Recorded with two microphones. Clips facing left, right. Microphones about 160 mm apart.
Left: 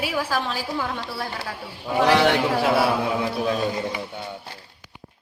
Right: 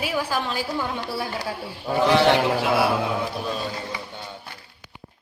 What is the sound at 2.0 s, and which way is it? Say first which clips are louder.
Speech: left 1 dB; 70° left (ahead or behind).